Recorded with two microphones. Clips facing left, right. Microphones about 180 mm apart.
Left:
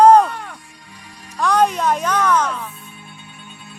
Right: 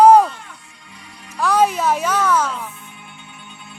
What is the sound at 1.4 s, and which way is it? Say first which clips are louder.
Music: even; 5° right (ahead or behind).